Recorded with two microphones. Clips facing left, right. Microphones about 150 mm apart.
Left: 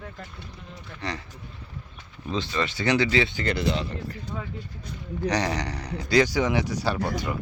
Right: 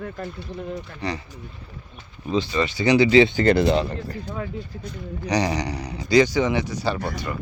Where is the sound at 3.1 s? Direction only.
20° right (ahead or behind).